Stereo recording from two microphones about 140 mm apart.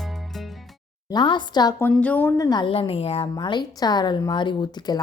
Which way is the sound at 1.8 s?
10° left (ahead or behind).